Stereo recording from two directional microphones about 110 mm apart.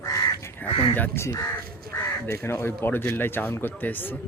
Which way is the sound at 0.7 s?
50° left (ahead or behind).